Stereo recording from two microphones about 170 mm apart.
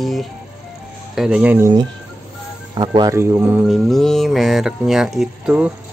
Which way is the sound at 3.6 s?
Centre (ahead or behind).